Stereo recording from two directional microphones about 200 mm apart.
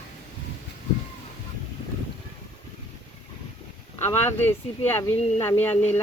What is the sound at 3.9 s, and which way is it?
Speech, 10° left (ahead or behind).